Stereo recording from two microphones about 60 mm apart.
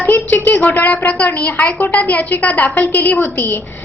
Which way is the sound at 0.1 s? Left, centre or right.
Left.